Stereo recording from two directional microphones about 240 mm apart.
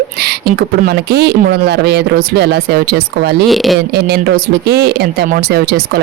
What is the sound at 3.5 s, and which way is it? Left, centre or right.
Speech, centre.